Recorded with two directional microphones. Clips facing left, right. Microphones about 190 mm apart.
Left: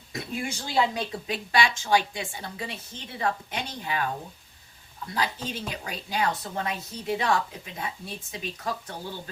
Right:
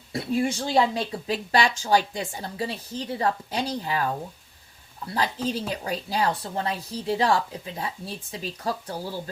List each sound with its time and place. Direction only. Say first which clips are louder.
0.1 s speech: right 8 dB; 35° right (ahead or behind)
5.1 s speech: right 4 dB; 35° right (ahead or behind)